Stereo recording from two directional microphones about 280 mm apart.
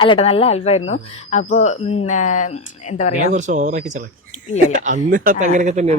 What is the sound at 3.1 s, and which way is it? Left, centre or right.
Speech, right.